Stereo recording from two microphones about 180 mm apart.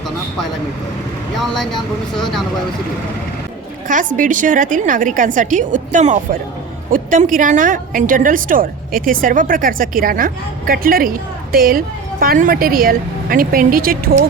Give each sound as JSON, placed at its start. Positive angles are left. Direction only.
{"t": 1.4, "sound": "speech", "side_deg": 0}
{"t": 3.8, "sound": "a woman's voice", "side_deg": -45}